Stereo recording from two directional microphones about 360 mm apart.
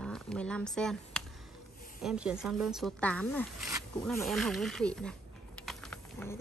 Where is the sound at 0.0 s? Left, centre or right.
Centre.